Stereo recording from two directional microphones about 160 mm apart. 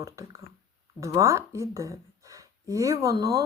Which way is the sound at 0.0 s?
20° right (ahead or behind).